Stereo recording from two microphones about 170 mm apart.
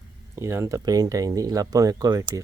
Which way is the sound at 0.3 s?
15° right (ahead or behind).